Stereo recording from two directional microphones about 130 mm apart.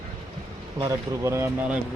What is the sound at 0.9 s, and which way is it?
Speech, 25° right (ahead or behind).